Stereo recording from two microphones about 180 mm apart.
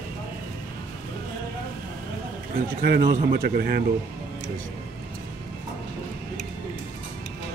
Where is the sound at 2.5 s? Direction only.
60° right (ahead or behind).